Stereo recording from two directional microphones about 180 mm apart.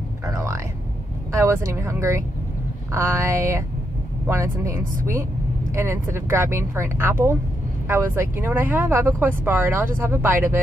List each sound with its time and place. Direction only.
0.3 s music: 20° right (ahead or behind)
1.3 s speech: 15° right (ahead or behind)